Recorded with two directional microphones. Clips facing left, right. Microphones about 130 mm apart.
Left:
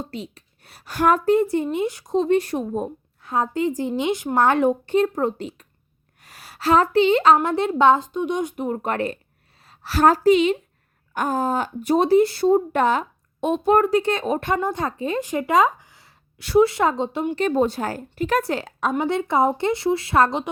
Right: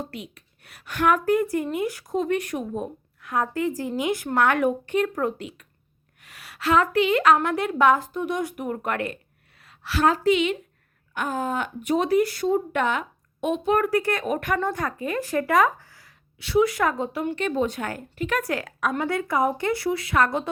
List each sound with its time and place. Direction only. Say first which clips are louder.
0.0 s a woman's voice: left 3 dB; 25° left (ahead or behind)
16.4 s speech: left 4 dB; 45° left (ahead or behind)
16.6 s a woman's voice: left 3 dB; 25° left (ahead or behind)
17.4 s a woman's voice: left 6 dB; 40° left (ahead or behind)